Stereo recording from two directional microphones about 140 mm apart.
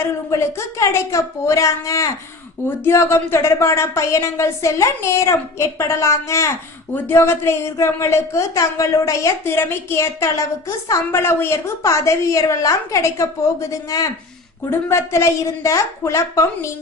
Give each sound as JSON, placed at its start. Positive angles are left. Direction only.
{"t": 0.3, "sound": "a woman's voice", "side_deg": 20}